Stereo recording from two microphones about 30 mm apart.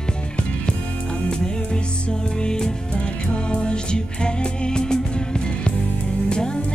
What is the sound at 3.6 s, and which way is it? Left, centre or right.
Music, left.